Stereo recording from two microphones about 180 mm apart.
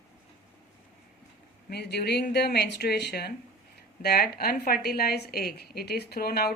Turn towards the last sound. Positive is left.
turn(degrees=60)  # may be behind; listen again after turning